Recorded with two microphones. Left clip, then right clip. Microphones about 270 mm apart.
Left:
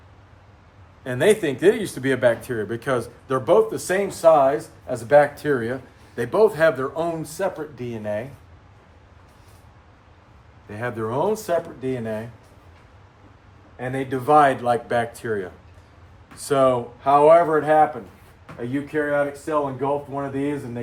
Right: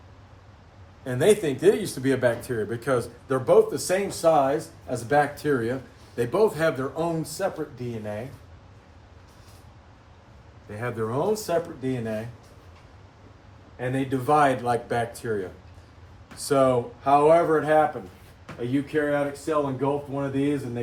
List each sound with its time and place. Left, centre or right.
1.0 s speech: left
5.4 s speech: centre
6.7 s speech: left
10.7 s speech: left
13.7 s speech: centre
14.7 s speech: left
16.3 s speech: left
17.3 s speech: centre